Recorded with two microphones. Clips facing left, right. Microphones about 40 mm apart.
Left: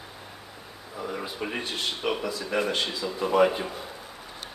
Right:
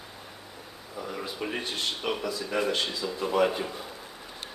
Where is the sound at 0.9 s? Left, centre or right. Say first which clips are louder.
Left 2 dB; centre.